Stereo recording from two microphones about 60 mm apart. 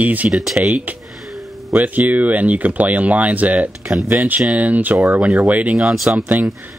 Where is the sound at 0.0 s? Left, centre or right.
Right.